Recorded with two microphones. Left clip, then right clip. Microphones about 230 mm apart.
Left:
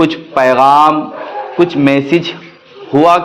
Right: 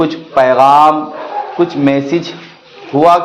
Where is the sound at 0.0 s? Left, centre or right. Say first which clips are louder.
Even; left.